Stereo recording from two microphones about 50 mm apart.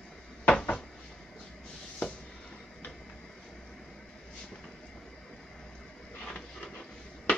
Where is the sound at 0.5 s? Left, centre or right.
Centre.